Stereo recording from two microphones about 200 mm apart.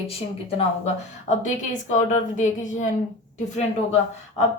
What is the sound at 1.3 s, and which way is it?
A woman's voice, 40° left (ahead or behind).